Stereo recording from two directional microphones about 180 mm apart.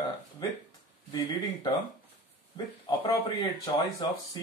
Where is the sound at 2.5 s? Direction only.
20° left (ahead or behind).